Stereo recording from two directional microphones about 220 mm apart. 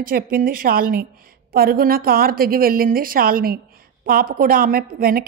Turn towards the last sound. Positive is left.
turn(degrees=-40)  # may be behind; listen again after turning